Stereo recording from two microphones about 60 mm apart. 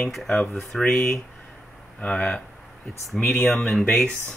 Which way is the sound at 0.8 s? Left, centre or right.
Left.